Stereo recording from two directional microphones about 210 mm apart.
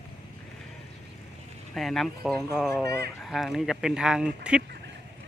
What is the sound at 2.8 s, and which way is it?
Speech, 15° left (ahead or behind).